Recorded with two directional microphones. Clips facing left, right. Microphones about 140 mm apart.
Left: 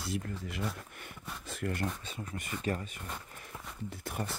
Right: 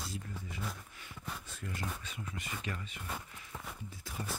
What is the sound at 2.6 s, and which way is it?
Speech, 45° left (ahead or behind).